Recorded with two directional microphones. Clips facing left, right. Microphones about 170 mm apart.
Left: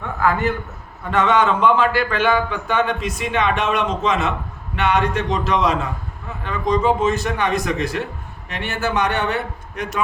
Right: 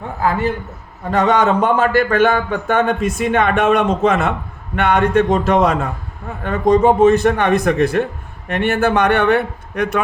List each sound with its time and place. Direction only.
0.0 s a man's voice: 30° right (ahead or behind); by 10.0 s 60° right (ahead or behind)